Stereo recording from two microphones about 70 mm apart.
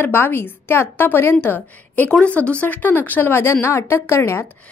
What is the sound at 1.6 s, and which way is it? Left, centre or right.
A woman's voice, left.